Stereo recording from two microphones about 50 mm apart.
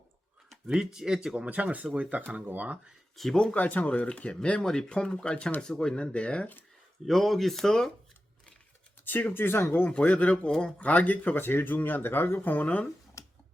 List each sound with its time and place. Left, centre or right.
0.7 s speech: centre
1.4 s speech: right
3.2 s speech: centre
3.5 s speech: left
7.0 s speech: centre
9.0 s speech: left
9.8 s speech: left
12.6 s speech: left
13.2 s a sound: left